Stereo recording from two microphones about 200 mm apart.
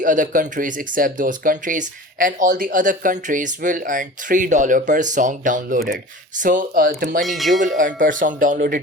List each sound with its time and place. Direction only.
0.0 s speech: 40° right (ahead or behind)
7.3 s speech: centre (ahead or behind)
7.6 s speech: 40° right (ahead or behind)